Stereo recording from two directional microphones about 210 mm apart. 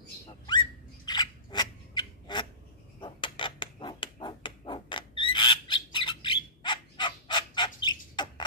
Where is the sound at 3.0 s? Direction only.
20° left (ahead or behind).